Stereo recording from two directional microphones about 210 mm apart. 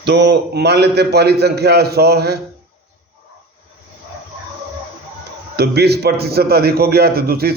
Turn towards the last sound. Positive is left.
turn(degrees=-45)  # may be behind; listen again after turning